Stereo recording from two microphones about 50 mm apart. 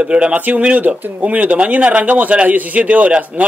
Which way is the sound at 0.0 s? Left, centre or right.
Right.